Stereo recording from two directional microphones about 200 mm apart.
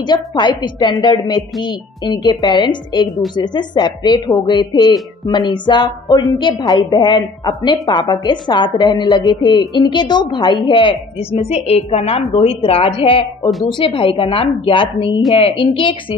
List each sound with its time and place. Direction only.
0.0 s a woman's voice: 20° left (ahead or behind)